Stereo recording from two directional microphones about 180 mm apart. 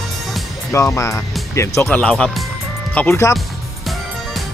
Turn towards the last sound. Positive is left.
turn(degrees=15)  # may be behind; listen again after turning